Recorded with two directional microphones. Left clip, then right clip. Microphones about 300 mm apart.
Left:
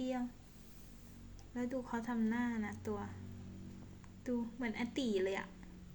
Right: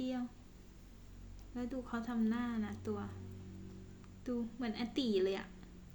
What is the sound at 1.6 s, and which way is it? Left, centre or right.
Speech, centre.